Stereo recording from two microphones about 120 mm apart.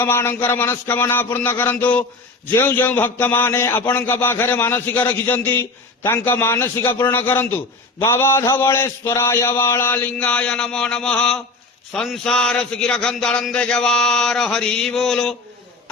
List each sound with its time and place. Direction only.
0.0 s a man's voice: 20° left (ahead or behind)
7.9 s mantra: 20° left (ahead or behind); by 11.3 s 5° left (ahead or behind)
12.0 s speech: 5° left (ahead or behind)